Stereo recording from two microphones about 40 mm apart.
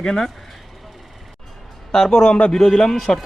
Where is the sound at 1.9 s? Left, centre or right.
Centre.